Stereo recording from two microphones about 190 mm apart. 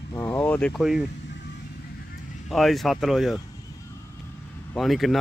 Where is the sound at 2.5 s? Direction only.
Centre (ahead or behind).